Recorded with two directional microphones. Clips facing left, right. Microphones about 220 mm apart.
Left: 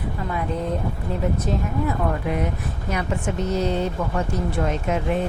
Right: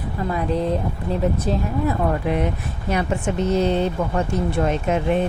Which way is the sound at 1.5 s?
30° right (ahead or behind).